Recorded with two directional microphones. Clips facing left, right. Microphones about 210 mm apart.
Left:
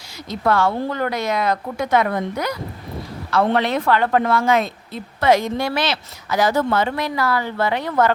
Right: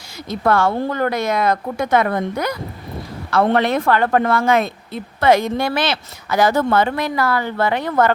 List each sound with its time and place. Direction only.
0.3 s a woman's voice: 50° right (ahead or behind)